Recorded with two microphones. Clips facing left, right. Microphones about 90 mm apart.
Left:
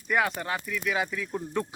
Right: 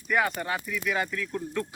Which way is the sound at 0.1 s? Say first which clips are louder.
Even; centre (ahead or behind).